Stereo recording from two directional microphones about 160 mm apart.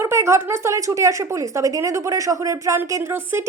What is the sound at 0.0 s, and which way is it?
Speech, 15° right (ahead or behind).